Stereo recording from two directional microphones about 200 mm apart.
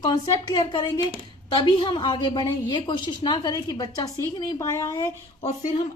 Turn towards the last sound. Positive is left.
turn(degrees=40)  # may be behind; listen again after turning